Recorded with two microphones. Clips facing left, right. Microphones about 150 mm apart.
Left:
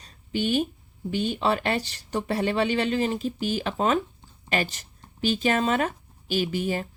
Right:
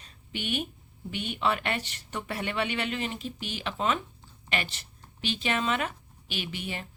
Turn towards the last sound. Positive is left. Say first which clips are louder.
# left 10 dB
turn(degrees=40)  # may be behind; listen again after turning